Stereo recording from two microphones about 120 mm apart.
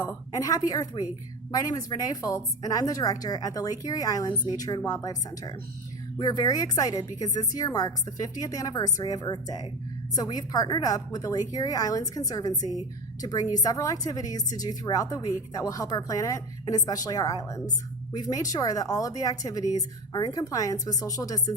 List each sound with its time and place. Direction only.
0.0 s speech: 30° left (ahead or behind)